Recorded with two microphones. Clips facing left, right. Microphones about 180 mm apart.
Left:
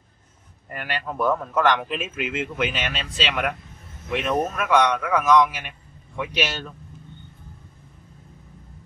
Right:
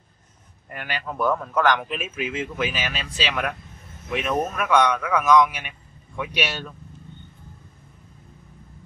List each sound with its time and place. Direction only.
0.7 s speech: centre (ahead or behind)